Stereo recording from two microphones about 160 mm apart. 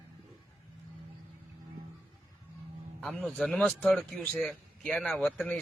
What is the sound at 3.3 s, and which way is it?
A man's voice, 5° left (ahead or behind).